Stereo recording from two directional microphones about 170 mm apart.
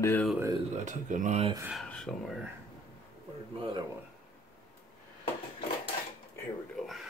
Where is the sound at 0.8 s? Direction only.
45° right (ahead or behind).